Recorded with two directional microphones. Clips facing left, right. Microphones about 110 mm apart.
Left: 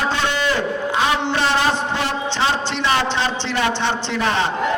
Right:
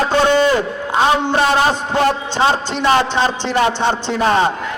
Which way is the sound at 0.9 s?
40° right (ahead or behind).